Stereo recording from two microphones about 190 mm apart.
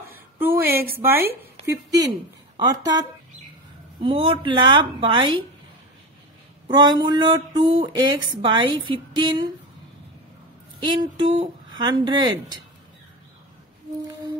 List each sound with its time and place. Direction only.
0.9 s a woman's voice: 10° right (ahead or behind)
6.7 s speech: 25° right (ahead or behind)
10.8 s speech: 25° right (ahead or behind)